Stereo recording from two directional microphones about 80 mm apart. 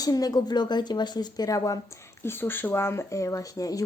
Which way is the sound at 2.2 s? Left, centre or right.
Left.